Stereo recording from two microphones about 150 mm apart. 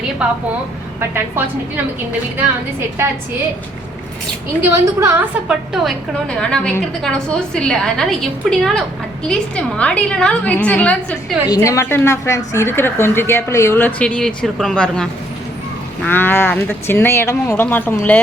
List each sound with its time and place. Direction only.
0.2 s a woman's voice: 10° right (ahead or behind)
4.7 s a woman's voice: 20° right (ahead or behind)
5.7 s a woman's voice: 5° left (ahead or behind)
11.4 s a woman's voice: 25° left (ahead or behind)